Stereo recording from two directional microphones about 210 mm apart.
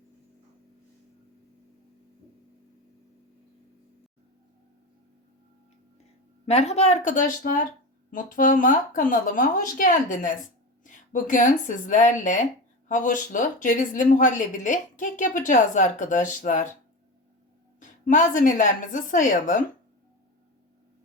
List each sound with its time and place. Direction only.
6.4 s speech: 30° left (ahead or behind)
18.0 s speech: 35° left (ahead or behind)